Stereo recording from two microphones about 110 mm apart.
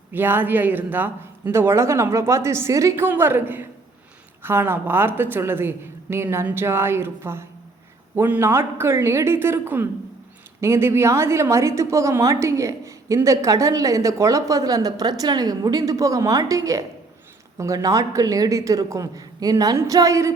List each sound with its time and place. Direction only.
0.1 s a woman's voice: 20° right (ahead or behind)